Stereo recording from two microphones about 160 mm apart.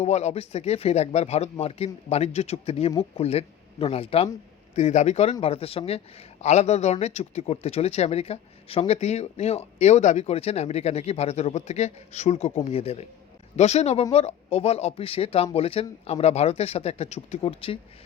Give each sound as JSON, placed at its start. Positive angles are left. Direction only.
{"t": 0.0, "sound": "a man's voice", "side_deg": 45}